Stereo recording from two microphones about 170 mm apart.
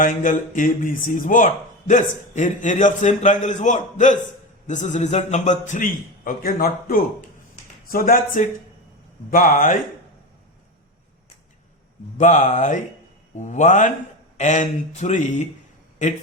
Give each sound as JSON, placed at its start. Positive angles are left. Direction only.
{"t": 0.0, "sound": "speech", "side_deg": 50}
{"t": 12.1, "sound": "speech", "side_deg": 45}